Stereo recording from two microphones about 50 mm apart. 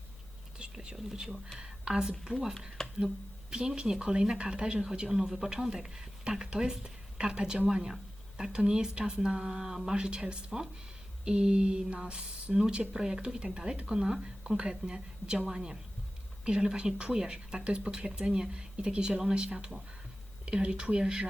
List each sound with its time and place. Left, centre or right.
0.6 s whispering: centre
0.9 s speech: centre
1.5 s a sound: centre
2.2 s speech: centre
2.8 s a sound: centre
3.5 s speech: centre